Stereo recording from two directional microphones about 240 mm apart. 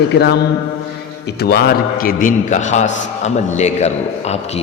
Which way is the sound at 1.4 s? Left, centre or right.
Left.